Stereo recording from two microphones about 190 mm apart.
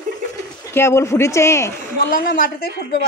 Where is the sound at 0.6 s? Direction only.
15° left (ahead or behind).